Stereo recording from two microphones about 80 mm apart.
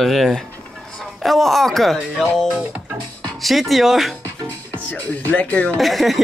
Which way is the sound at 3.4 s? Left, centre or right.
Centre.